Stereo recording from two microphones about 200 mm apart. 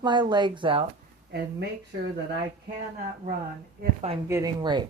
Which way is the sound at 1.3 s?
55° right (ahead or behind).